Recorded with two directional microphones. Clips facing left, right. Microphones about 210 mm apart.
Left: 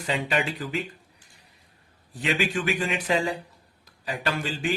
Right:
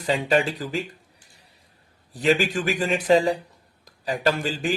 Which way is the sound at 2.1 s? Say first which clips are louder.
Right 5 dB; 40° right (ahead or behind).